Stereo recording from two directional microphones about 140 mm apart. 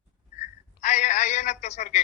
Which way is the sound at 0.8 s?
60° left (ahead or behind).